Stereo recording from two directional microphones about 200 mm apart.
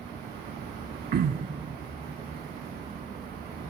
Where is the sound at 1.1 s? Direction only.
50° right (ahead or behind).